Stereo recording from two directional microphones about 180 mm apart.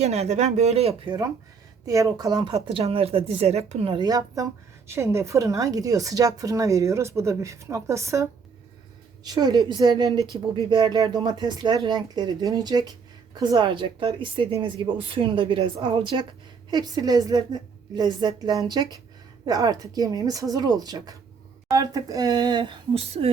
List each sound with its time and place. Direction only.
0.0 s speech: 35° right (ahead or behind)